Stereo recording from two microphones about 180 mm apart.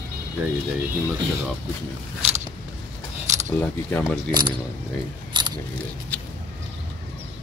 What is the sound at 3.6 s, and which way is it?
Speech, 5° left (ahead or behind).